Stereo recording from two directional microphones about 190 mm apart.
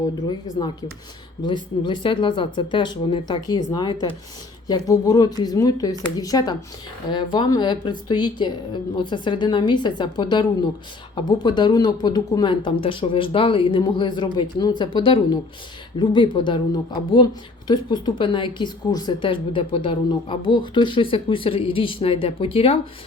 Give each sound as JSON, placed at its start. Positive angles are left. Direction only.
{"t": 0.0, "sound": "a woman's voice", "side_deg": 20}